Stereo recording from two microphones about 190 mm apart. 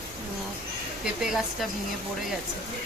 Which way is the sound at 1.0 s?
Centre (ahead or behind).